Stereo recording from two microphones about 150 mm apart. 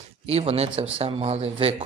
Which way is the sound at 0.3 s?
45° right (ahead or behind).